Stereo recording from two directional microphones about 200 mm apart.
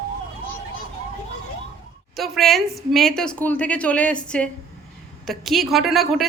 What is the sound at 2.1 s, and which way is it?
A woman's voice, centre (ahead or behind).